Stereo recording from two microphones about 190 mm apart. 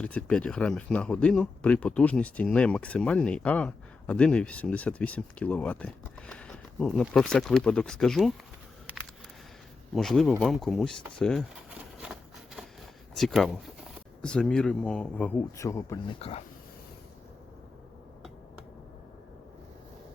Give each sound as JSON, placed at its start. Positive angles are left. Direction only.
{"t": 0.0, "sound": "speech", "side_deg": 5}
{"t": 9.9, "sound": "speech", "side_deg": 0}
{"t": 11.7, "sound": "a sound", "side_deg": -5}
{"t": 13.1, "sound": "speech", "side_deg": 0}
{"t": 16.1, "sound": "speech", "side_deg": 30}